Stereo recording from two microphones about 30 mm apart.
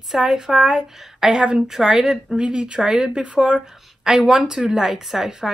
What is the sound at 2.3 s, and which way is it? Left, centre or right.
Speech, right.